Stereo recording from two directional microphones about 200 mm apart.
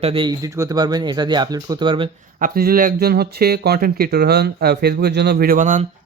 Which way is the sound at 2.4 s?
45° right (ahead or behind).